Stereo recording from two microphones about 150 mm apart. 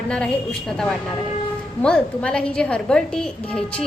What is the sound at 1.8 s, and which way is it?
A woman's voice, 5° left (ahead or behind).